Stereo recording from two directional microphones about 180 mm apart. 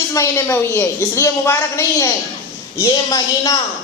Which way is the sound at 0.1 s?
15° left (ahead or behind).